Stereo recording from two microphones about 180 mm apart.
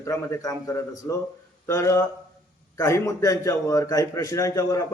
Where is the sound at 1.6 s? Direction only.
15° left (ahead or behind).